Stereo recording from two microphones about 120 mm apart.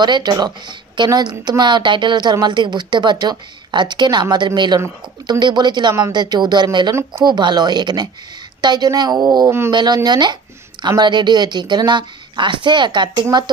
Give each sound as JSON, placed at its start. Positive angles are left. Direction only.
{"t": 0.0, "sound": "speech", "side_deg": -35}